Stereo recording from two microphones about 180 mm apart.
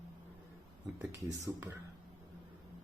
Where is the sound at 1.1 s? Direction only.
15° right (ahead or behind).